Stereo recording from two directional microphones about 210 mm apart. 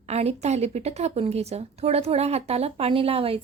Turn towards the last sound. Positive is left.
turn(degrees=-25)  # may be behind; listen again after turning